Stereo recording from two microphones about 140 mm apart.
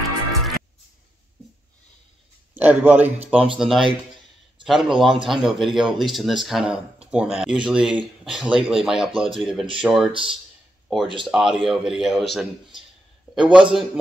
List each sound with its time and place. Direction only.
0.3 s music: centre (ahead or behind)
2.5 s a man's voice: 10° right (ahead or behind)
11.2 s speech: 5° right (ahead or behind)